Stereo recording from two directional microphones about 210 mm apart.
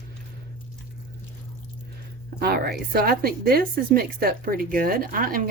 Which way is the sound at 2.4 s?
50° right (ahead or behind).